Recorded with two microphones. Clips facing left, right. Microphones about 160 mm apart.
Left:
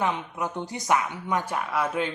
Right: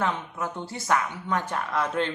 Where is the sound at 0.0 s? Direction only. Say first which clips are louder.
Left 1 dB; 15° left (ahead or behind).